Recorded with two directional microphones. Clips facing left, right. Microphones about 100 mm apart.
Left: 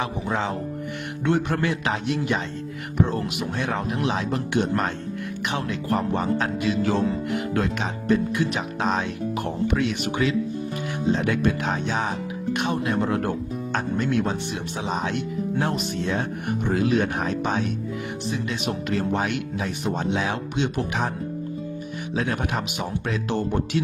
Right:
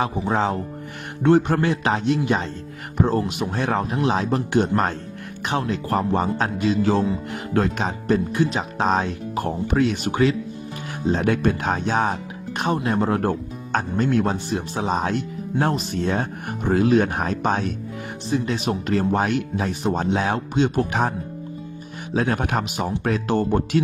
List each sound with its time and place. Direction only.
0.0 s speech: 35° right (ahead or behind)
22.1 s speech: 40° right (ahead or behind)